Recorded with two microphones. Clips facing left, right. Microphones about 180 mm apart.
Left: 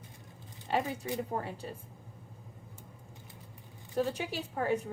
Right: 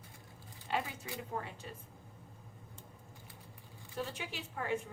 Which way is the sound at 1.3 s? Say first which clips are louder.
Left 5 dB; 35° left (ahead or behind).